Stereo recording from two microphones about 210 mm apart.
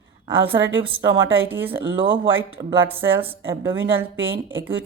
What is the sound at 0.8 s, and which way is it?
Speech, 25° right (ahead or behind).